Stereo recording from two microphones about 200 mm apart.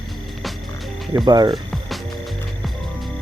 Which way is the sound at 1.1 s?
20° right (ahead or behind).